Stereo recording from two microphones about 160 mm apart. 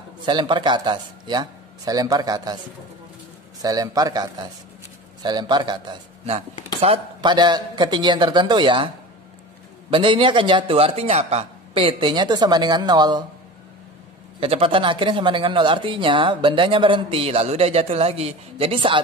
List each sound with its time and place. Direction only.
0.2 s speech: 30° right (ahead or behind)
3.6 s speech: 25° right (ahead or behind)
14.4 s speech: 35° right (ahead or behind)